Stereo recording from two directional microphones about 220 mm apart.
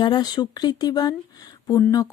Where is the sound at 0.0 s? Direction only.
20° left (ahead or behind).